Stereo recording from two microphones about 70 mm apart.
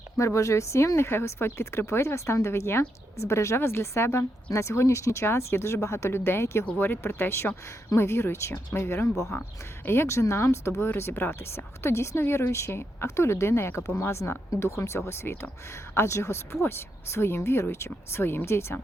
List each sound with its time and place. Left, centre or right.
0.2 s speech: left